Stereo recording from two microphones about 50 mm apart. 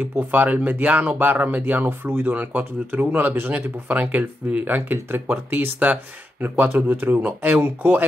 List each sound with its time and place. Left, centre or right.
0.0 s speech: right
7.2 s speech: right
7.6 s speech: right